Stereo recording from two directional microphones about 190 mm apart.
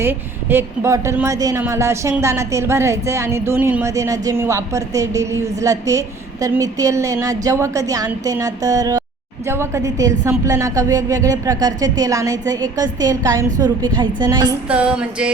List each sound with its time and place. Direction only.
0.0 s a woman's voice: 10° right (ahead or behind)
14.7 s music: 5° right (ahead or behind)